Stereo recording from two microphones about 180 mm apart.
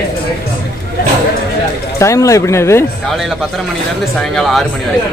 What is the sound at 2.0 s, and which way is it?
Speech, 15° left (ahead or behind).